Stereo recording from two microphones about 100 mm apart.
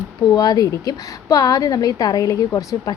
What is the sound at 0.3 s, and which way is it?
A woman's voice, 40° left (ahead or behind).